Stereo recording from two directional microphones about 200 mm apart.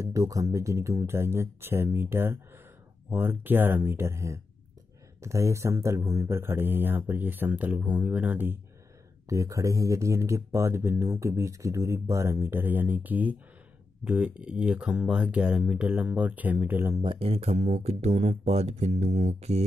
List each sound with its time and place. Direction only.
0.0 s speech: 15° right (ahead or behind)
17.0 s speech: 25° right (ahead or behind)